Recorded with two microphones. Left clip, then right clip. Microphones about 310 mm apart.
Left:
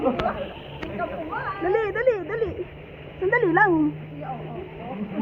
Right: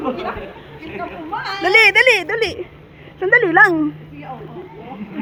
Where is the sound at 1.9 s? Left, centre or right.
Right.